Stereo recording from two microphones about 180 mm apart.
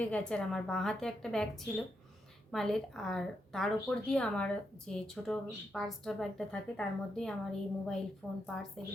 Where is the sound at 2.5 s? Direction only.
Centre (ahead or behind).